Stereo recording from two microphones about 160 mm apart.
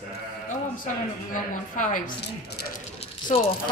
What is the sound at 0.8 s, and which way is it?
A woman's voice, 55° left (ahead or behind).